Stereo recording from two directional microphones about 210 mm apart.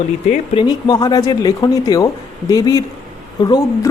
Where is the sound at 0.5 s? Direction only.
20° left (ahead or behind).